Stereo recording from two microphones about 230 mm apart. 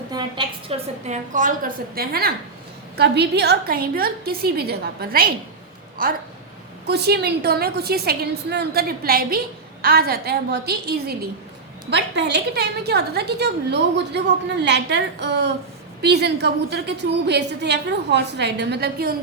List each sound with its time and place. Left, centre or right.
0.1 s a woman's voice: centre; by 19.1 s right